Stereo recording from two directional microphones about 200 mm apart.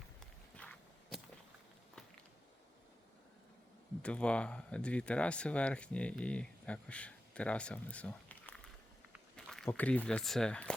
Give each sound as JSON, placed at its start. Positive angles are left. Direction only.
{"t": 0.2, "sound": "walk", "side_deg": 5}
{"t": 4.0, "sound": "speech", "side_deg": 5}